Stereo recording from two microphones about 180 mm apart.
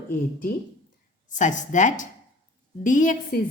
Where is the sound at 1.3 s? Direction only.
45° left (ahead or behind).